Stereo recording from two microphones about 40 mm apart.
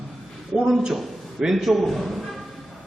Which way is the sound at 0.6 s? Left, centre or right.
Centre.